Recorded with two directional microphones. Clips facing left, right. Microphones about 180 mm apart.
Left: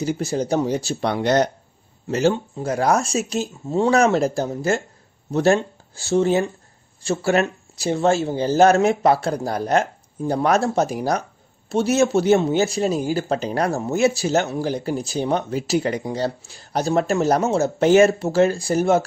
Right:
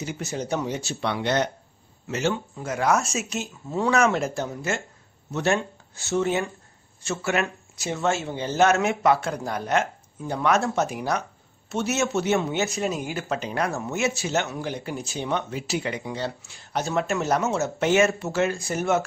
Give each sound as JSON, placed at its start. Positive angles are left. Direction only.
{"t": 0.0, "sound": "speech", "side_deg": 35}